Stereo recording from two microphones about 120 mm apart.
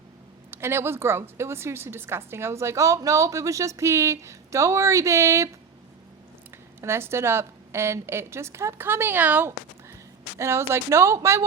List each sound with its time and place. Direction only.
0.5 s a woman's voice: 20° right (ahead or behind)
6.8 s a woman's voice: 20° right (ahead or behind)